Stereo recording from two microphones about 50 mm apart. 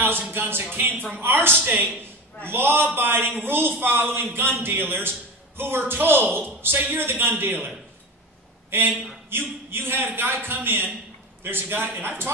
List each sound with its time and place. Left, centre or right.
0.3 s a woman's voice: right
8.6 s a sound: right
9.3 s a man's voice: right